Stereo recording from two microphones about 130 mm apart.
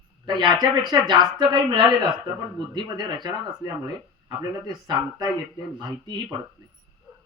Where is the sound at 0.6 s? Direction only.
35° right (ahead or behind).